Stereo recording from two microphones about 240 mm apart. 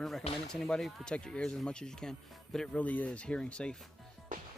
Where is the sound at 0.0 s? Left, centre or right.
Centre.